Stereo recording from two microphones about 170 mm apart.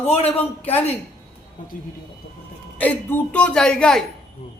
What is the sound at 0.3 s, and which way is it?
Speech, 10° left (ahead or behind).